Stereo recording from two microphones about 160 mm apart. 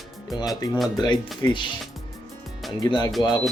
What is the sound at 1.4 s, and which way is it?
Speech, 30° left (ahead or behind).